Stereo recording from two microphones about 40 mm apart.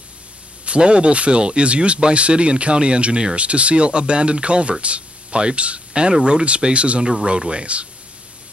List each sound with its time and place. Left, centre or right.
0.7 s speech: right